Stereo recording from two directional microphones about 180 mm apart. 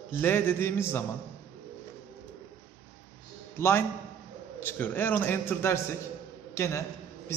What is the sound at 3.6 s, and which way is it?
A man's voice, 15° left (ahead or behind).